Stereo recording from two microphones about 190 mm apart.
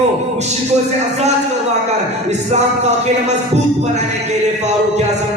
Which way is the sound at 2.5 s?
35° right (ahead or behind).